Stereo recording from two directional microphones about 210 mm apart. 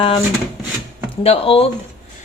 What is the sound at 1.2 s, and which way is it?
Speech, 25° left (ahead or behind).